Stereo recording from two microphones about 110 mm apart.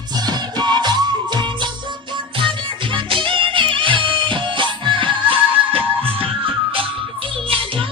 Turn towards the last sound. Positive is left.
turn(degrees=-55)  # may be behind; listen again after turning